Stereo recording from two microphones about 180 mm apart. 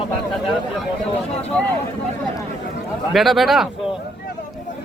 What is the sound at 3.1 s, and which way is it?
Speech, centre (ahead or behind).